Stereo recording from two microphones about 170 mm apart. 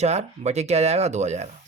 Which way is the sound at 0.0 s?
40° right (ahead or behind).